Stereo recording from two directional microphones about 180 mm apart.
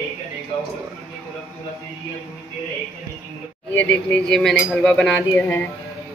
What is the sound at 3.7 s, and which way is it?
Speech, 5° left (ahead or behind).